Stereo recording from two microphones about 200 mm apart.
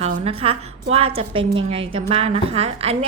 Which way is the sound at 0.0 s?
30° right (ahead or behind).